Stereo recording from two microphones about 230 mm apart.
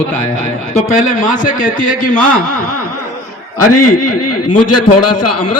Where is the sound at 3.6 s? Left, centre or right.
Left.